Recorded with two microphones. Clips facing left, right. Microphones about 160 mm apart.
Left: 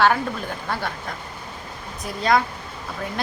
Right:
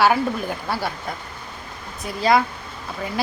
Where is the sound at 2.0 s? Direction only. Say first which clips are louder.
Right 2 dB; 5° right (ahead or behind).